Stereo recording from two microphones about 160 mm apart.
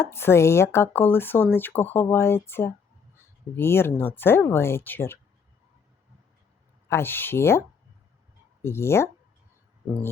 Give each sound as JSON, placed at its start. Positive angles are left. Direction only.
{"t": 0.0, "sound": "speech", "side_deg": 15}
{"t": 6.8, "sound": "speech", "side_deg": 15}
{"t": 8.6, "sound": "speech", "side_deg": 15}